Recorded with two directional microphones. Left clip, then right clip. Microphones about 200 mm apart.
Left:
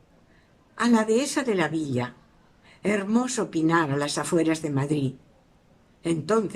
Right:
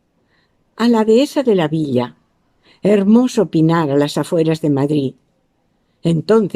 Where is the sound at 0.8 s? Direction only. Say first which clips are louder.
Right 10 dB; 50° right (ahead or behind).